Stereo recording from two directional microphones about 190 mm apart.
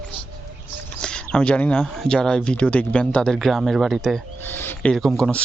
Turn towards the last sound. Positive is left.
turn(degrees=0)  # may be behind; listen again after turning